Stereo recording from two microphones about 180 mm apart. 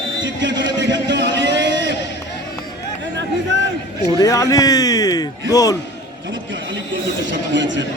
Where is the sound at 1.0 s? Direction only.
75° right (ahead or behind).